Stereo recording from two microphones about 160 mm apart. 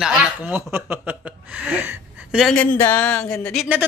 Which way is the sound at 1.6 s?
10° right (ahead or behind).